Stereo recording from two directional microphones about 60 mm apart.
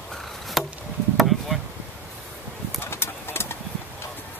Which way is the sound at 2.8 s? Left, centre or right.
Left.